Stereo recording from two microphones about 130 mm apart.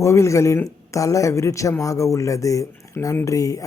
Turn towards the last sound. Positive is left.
turn(degrees=25)  # may be behind; listen again after turning